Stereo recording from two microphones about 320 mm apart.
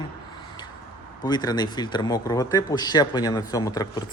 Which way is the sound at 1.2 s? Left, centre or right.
Centre.